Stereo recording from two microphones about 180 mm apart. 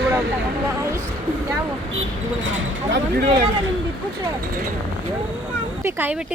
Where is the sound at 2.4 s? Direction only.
85° right.